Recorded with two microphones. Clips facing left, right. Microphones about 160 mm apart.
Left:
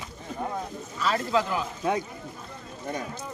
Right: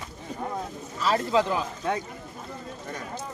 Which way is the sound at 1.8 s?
10° left (ahead or behind).